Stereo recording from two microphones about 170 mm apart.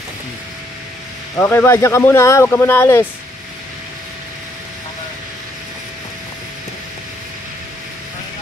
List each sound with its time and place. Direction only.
1.3 s speech: 10° left (ahead or behind)